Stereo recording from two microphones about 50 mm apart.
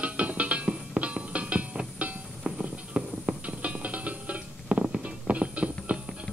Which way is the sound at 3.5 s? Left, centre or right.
Right.